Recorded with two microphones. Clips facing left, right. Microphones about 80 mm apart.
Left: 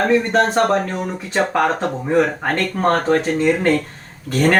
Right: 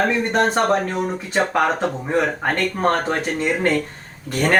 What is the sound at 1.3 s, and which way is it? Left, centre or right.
Speech, centre.